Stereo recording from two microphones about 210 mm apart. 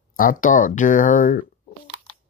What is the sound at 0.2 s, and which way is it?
Speech, 40° left (ahead or behind).